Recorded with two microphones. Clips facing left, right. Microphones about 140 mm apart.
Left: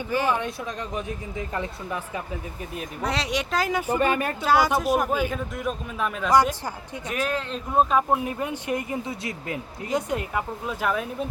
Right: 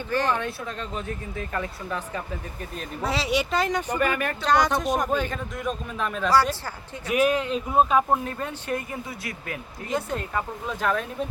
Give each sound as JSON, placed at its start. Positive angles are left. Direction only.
{"t": 0.1, "sound": "speech", "side_deg": 10}
{"t": 3.0, "sound": "a man's voice", "side_deg": -5}
{"t": 3.9, "sound": "speech", "side_deg": 25}
{"t": 4.4, "sound": "a man's voice", "side_deg": 5}
{"t": 6.3, "sound": "speech", "side_deg": 15}
{"t": 7.1, "sound": "speech", "side_deg": -15}
{"t": 8.1, "sound": "speech", "side_deg": 15}